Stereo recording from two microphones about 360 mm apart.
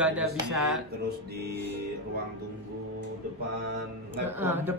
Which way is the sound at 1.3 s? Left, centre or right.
Right.